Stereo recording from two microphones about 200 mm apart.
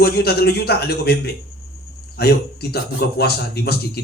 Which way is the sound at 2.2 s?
55° left (ahead or behind).